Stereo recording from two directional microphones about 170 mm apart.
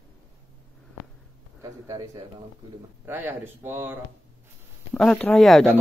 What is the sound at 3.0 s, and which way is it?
Speech, 10° right (ahead or behind).